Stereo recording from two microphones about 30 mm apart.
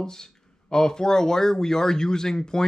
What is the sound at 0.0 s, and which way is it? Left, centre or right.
Speech, left.